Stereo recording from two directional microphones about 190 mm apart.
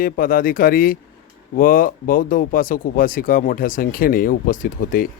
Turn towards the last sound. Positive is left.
turn(degrees=45)  # may be behind; listen again after turning